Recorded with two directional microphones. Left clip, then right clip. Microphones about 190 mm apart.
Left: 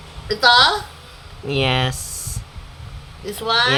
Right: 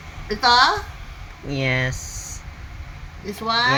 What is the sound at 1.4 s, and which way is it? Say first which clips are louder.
Speech: left 3 dB; 25° left (ahead or behind).